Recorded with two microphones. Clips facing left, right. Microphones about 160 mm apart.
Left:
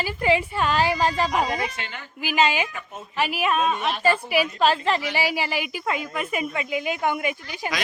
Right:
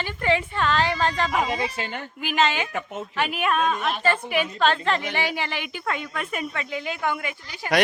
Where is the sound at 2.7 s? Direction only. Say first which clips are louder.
Right 7 dB; 75° right (ahead or behind).